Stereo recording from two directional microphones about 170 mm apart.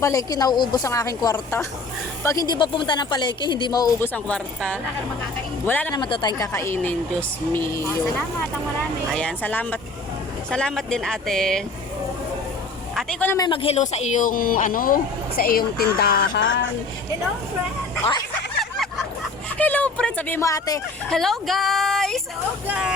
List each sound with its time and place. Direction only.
0.0 s speech: 20° left (ahead or behind)
4.1 s a woman's voice: 5° left (ahead or behind)
5.9 s a woman's voice: 25° left (ahead or behind); by 7.6 s 5° left (ahead or behind)
9.1 s a woman's voice: 10° left (ahead or behind)
13.0 s a woman's voice: 5° left (ahead or behind)
13.3 s speech: 25° left (ahead or behind); by 16.6 s 90° left
18.6 s vehicle: centre (ahead or behind)
19.5 s speech: 10° left (ahead or behind)
21.1 s a woman's voice: centre (ahead or behind)